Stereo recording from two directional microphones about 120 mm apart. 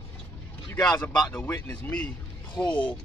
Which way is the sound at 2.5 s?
40° left (ahead or behind).